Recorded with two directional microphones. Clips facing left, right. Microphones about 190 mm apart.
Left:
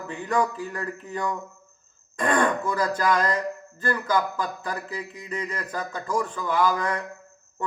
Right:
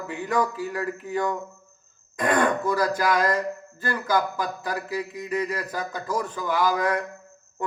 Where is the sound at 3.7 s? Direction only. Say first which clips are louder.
Even; 10° right (ahead or behind).